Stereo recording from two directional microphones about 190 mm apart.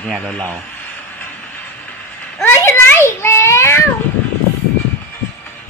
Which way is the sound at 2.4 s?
15° left (ahead or behind).